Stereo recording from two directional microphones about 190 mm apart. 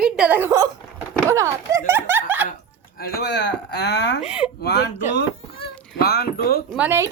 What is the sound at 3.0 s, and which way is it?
Speech, 55° left (ahead or behind).